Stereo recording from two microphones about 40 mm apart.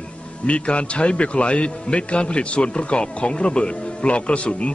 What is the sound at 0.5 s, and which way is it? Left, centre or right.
A man's voice, left.